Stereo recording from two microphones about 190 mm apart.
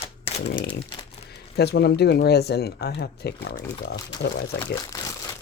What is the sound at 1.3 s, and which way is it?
Speech, 60° left (ahead or behind).